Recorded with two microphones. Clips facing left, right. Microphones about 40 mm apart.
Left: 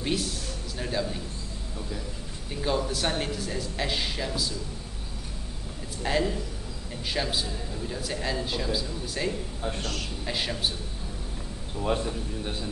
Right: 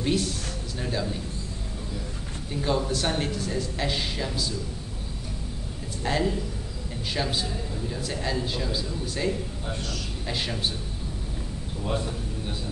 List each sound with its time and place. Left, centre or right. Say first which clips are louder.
0.0 s speech: right 3 dB; centre
2.6 s speech: right 1 dB; centre
6.0 s speech: right 1 dB; centre
9.8 s a man's voice: left 1 dB; left
10.2 s speech: even; centre
11.8 s speech: left 2 dB; left